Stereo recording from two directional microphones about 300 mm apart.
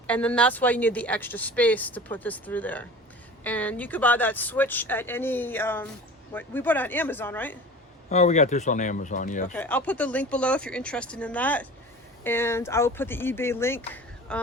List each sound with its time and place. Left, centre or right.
0.1 s speech: centre
8.1 s speech: left
9.5 s speech: centre